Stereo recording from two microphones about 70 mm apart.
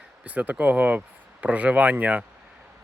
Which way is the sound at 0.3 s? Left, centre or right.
Right.